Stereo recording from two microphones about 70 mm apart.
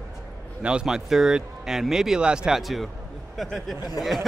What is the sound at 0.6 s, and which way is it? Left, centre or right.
Speech, centre.